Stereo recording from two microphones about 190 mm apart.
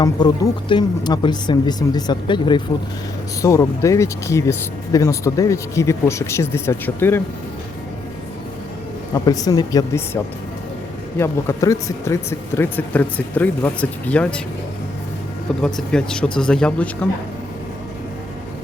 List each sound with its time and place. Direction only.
0.2 s speech: 25° left (ahead or behind)
9.1 s speech: 20° left (ahead or behind)
11.2 s speech: 15° left (ahead or behind)
15.6 s speech: 5° left (ahead or behind)